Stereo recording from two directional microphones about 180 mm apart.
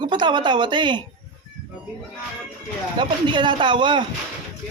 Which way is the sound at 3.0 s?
25° right (ahead or behind).